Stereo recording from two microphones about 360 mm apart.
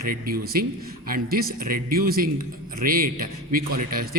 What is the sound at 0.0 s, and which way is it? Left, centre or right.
A man's voice, right.